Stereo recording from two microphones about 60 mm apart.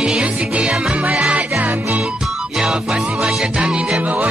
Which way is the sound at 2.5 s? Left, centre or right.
Centre.